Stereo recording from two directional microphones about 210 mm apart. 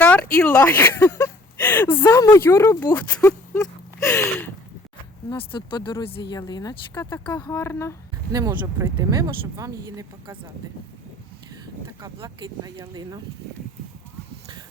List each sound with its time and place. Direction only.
0.0 s speech: 5° left (ahead or behind)
5.3 s speech: 25° left (ahead or behind)
8.3 s speech: 15° right (ahead or behind)
11.9 s speech: 20° right (ahead or behind)